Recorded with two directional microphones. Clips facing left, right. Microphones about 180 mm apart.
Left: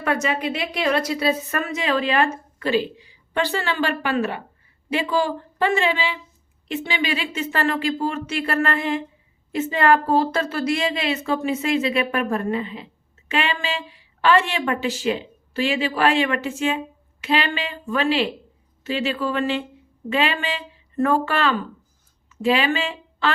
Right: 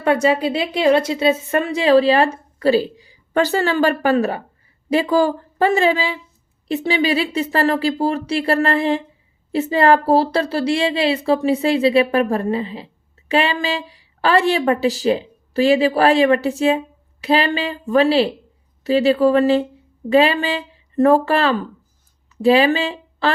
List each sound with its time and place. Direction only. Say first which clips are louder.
0.0 s a woman's voice: right 7 dB; 30° right (ahead or behind)